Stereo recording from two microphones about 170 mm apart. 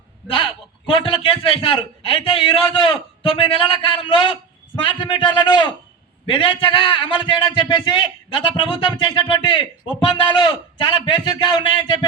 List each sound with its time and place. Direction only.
0.3 s a man's voice: 30° left (ahead or behind)